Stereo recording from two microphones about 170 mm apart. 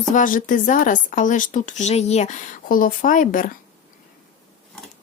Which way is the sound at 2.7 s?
55° left (ahead or behind).